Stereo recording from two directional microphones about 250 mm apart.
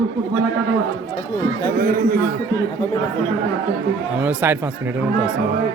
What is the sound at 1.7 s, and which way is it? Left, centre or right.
Speech, right.